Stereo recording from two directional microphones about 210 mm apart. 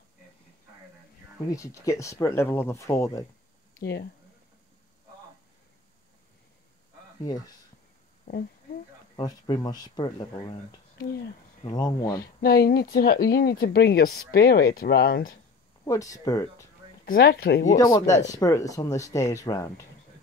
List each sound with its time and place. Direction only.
1.5 s speech: 15° left (ahead or behind)
3.8 s speech: 50° left (ahead or behind)
7.2 s speech: 15° left (ahead or behind)
9.1 s speech: 20° left (ahead or behind)
11.6 s speech: 20° left (ahead or behind)
12.2 s speech: 45° left (ahead or behind)
15.8 s speech: 15° left (ahead or behind)
17.0 s speech: 45° left (ahead or behind)
17.7 s speech: 15° left (ahead or behind)